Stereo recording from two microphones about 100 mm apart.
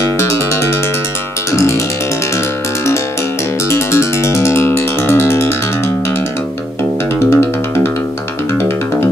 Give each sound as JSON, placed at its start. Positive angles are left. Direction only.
{"t": 1.5, "sound": "music", "side_deg": 30}
{"t": 3.7, "sound": "music", "side_deg": 25}
{"t": 7.2, "sound": "music", "side_deg": 25}